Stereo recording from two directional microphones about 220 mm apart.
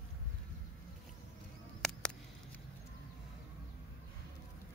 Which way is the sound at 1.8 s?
5° left (ahead or behind).